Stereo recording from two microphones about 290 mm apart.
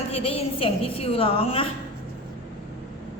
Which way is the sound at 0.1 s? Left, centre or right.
Centre.